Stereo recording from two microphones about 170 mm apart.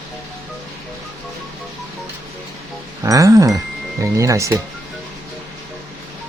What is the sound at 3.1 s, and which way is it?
Speech, 20° right (ahead or behind).